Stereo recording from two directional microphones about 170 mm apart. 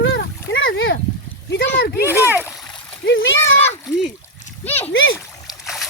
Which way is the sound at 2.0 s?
10° right (ahead or behind).